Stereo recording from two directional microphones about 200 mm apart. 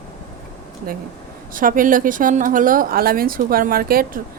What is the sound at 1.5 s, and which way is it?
Speech, 45° right (ahead or behind).